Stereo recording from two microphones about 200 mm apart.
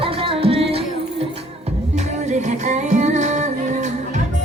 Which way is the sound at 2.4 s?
35° right (ahead or behind).